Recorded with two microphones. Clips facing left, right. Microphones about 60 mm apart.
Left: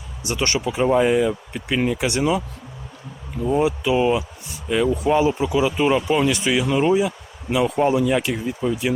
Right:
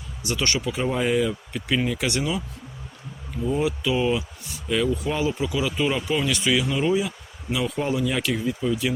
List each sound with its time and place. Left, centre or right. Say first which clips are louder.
0.3 s speech: left 3 dB; left
3.6 s speech: left 5 dB; centre